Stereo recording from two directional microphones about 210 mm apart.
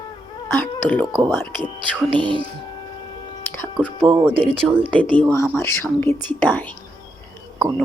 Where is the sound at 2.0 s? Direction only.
25° right (ahead or behind).